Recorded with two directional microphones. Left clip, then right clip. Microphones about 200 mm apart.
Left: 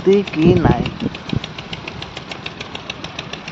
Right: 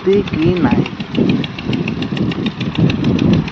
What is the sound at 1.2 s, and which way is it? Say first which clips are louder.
Engine: right 8 dB; 55° left (ahead or behind).